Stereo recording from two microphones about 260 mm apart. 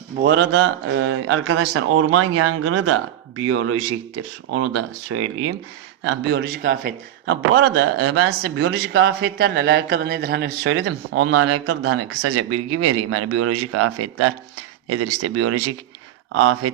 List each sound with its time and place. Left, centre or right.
0.2 s speech: right
6.1 s speech: right